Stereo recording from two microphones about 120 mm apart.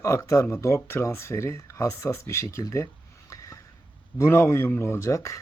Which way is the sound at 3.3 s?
25° left (ahead or behind).